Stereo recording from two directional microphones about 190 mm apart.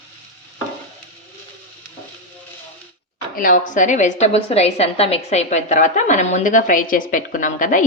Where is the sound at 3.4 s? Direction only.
45° left (ahead or behind).